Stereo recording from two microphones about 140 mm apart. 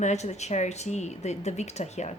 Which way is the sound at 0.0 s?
55° left (ahead or behind).